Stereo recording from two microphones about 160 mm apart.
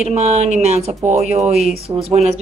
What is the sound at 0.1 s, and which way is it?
A woman's voice, 45° right (ahead or behind).